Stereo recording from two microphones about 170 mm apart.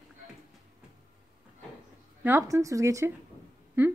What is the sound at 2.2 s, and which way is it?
Speech, 15° right (ahead or behind).